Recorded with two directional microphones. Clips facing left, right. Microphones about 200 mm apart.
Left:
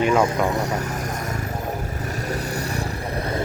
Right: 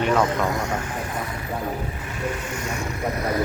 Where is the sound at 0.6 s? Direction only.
40° left (ahead or behind).